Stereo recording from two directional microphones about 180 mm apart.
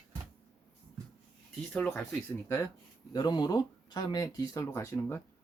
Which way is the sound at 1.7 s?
5° left (ahead or behind).